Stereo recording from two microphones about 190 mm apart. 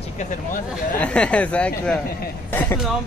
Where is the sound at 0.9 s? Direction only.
5° left (ahead or behind).